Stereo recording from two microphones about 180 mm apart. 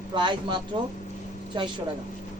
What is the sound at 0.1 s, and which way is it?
Speech, 25° right (ahead or behind).